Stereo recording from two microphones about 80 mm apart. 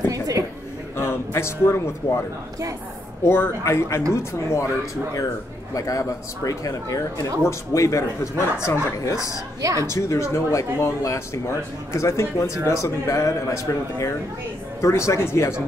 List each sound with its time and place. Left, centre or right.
0.1 s a sound: right
0.9 s a man's voice: left
3.3 s speech: left
5.8 s speech: left
9.6 s a woman's voice: right
9.8 s speech: left